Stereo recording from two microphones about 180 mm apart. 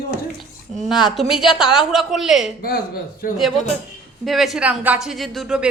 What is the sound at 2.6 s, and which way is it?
Speech, 55° left (ahead or behind).